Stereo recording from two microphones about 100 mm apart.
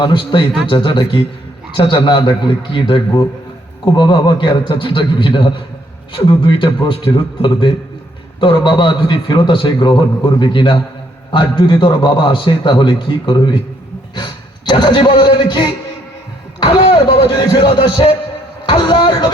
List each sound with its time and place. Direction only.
0.0 s a man's voice: 50° left (ahead or behind)